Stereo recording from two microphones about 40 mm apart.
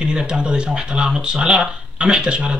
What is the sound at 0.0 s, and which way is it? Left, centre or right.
Speech, right.